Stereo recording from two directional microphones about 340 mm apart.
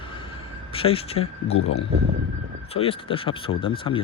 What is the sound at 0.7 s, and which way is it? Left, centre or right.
Speech, centre.